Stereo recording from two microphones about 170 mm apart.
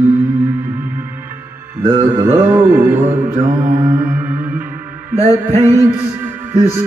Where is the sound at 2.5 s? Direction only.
10° right (ahead or behind).